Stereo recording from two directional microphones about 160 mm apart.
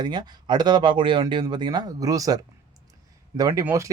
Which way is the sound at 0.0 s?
25° right (ahead or behind).